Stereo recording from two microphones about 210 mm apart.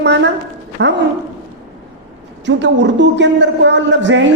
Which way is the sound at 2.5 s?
60° right (ahead or behind).